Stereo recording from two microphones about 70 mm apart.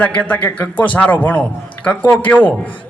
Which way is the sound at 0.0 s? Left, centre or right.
Left.